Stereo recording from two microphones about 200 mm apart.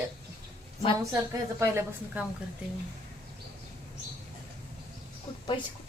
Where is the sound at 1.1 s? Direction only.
10° right (ahead or behind).